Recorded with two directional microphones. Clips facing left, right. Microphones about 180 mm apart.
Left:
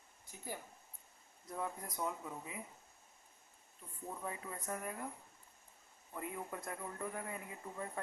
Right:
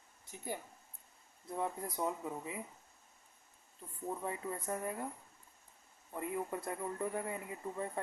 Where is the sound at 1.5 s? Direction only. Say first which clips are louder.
Right 4 dB; 25° right (ahead or behind).